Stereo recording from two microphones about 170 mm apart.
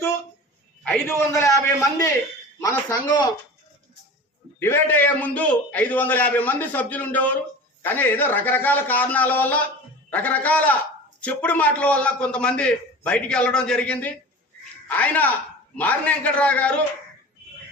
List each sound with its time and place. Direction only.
0.9 s a man's voice: 15° left (ahead or behind)
4.6 s a man's voice: 10° left (ahead or behind)